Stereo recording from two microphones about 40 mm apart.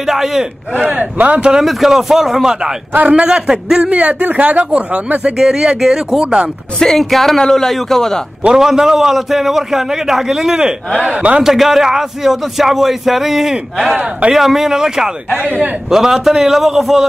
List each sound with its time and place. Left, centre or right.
0.0 s a man's voice: centre
0.8 s speech: right
1.6 s a man's voice: centre
3.1 s a man's voice: right
3.9 s speech: right
5.4 s a man's voice: centre
6.8 s a man's voice: centre
8.5 s a man's voice: centre